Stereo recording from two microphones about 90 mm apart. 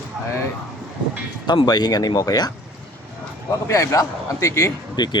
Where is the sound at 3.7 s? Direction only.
35° left (ahead or behind).